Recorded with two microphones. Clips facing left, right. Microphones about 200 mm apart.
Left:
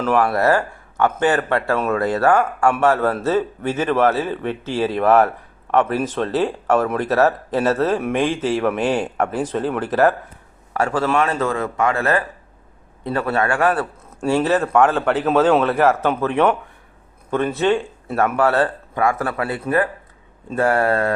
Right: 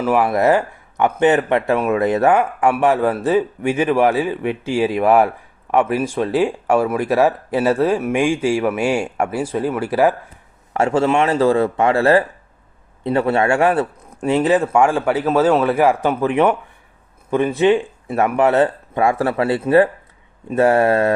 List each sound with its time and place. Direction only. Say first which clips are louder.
0.0 s speech: right 2 dB; 15° right (ahead or behind)
10.8 s speech: right 3 dB; 25° right (ahead or behind)